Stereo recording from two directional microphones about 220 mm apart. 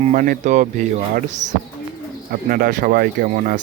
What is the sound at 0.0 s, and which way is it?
Speech, 35° right (ahead or behind).